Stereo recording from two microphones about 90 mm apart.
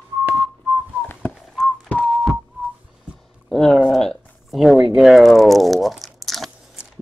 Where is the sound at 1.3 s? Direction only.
Centre (ahead or behind).